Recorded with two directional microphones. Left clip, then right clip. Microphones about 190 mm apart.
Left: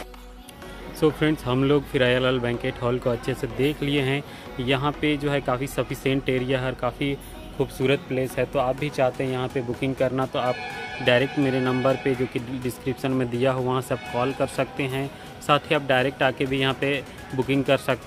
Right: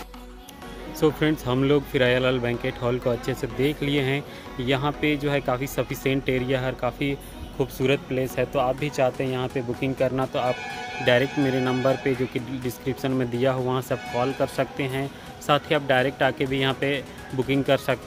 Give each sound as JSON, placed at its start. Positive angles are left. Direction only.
{"t": 0.9, "sound": "speech", "side_deg": 0}